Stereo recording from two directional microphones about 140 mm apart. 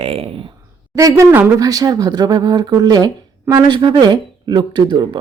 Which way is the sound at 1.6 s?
25° right (ahead or behind).